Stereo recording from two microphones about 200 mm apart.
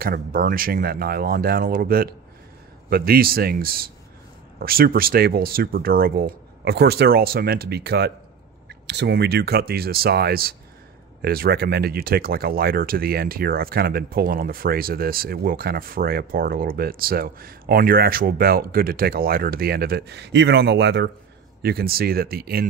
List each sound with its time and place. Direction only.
0.0 s speech: 45° right (ahead or behind)